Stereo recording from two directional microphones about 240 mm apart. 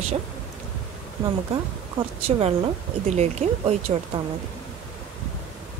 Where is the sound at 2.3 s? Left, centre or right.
Right.